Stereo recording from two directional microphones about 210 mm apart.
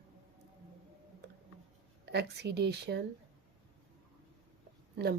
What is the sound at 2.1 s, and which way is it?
Speech, 50° right (ahead or behind).